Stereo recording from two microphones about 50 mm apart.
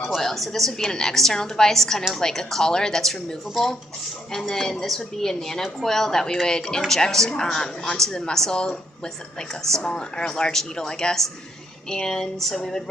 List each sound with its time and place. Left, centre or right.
0.2 s speech: centre